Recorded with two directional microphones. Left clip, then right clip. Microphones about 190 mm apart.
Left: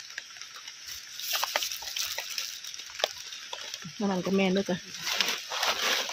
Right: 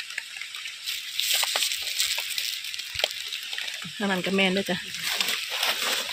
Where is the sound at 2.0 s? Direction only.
40° left (ahead or behind).